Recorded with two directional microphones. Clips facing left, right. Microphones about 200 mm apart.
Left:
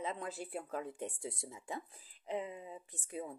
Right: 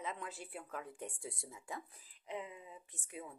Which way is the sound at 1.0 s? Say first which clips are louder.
Left 4 dB; 20° left (ahead or behind).